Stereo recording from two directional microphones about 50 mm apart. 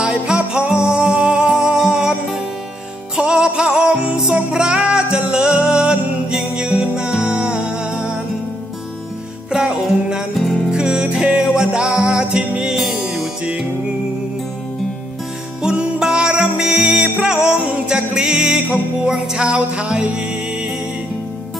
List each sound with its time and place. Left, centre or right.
0.0 s music: centre
9.5 s music: centre
10.3 s music: centre
10.7 s music: centre
15.7 s music: centre